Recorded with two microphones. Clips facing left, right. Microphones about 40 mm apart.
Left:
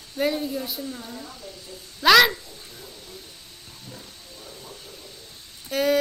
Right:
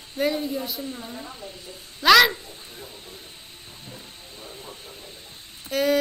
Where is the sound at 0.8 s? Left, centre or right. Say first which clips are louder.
Even; right.